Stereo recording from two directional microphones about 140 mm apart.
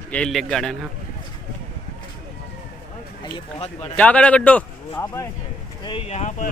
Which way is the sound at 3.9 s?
10° left (ahead or behind).